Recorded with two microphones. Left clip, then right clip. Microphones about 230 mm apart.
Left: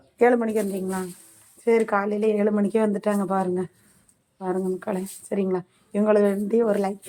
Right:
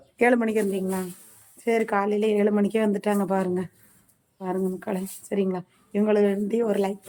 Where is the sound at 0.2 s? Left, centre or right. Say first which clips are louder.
Left 2 dB; centre.